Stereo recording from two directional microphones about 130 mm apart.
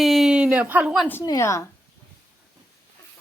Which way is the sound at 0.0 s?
Centre (ahead or behind).